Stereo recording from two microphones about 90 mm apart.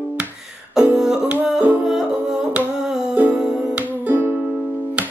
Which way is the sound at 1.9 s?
5° right (ahead or behind).